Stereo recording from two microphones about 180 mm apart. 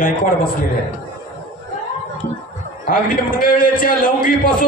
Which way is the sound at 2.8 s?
50° left (ahead or behind).